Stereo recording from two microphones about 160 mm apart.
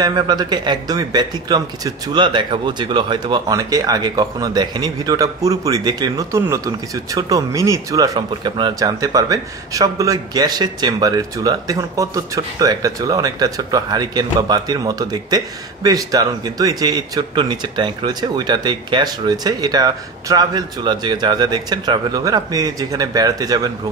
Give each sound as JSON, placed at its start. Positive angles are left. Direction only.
{"t": 0.0, "sound": "speech", "side_deg": -25}